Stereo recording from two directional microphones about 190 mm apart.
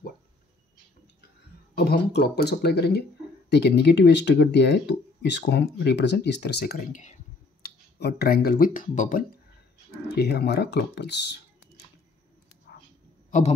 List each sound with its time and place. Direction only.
1.8 s speech: 60° left (ahead or behind); by 7.2 s 40° left (ahead or behind)
7.6 s speech: 55° left (ahead or behind)
10.1 s speech: 60° left (ahead or behind)